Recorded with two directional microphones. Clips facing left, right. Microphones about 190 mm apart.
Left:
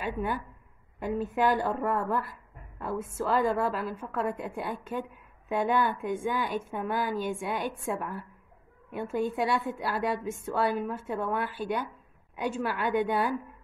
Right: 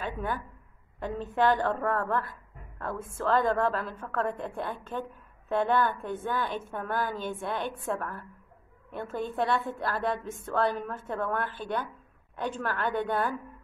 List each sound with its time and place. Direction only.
0.0 s a woman's voice: 10° left (ahead or behind)